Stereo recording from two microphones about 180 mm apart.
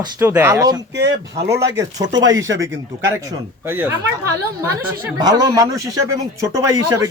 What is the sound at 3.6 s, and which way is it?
Speech, 10° right (ahead or behind).